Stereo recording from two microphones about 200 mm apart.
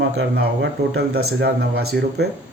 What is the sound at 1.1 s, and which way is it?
Speech, 90° right.